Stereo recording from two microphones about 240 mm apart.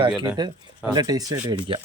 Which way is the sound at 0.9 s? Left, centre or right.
Centre.